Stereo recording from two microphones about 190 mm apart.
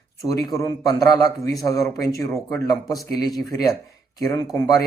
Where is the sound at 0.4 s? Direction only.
20° left (ahead or behind).